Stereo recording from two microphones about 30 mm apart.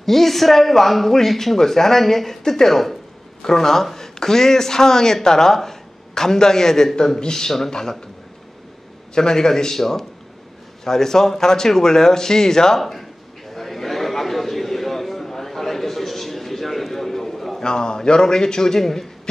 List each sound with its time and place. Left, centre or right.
0.0 s a man's voice: centre
9.1 s a man's voice: left
13.6 s a sound: centre
17.6 s a man's voice: left